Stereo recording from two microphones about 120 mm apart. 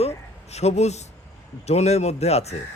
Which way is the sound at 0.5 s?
65° left (ahead or behind).